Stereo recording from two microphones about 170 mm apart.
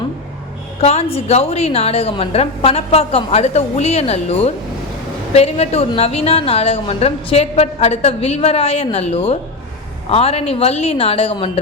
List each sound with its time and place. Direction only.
0.8 s a woman's voice: 40° left (ahead or behind)